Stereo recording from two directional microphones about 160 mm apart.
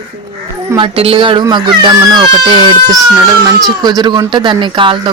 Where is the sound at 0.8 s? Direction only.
35° right (ahead or behind).